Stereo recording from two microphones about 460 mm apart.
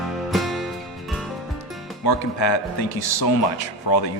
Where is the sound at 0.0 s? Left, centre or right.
Centre.